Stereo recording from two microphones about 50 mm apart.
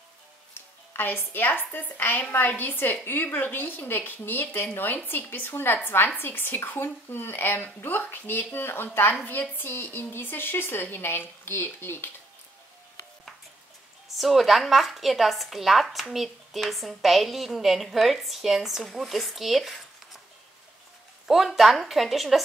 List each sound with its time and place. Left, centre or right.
0.6 s music: left
1.3 s a woman's voice: left
14.1 s a woman's voice: centre
21.3 s a woman's voice: centre